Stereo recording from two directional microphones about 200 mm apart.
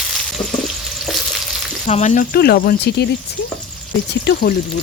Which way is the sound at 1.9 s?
35° left (ahead or behind).